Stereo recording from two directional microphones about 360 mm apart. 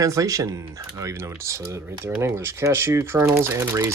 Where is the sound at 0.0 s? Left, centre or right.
Centre.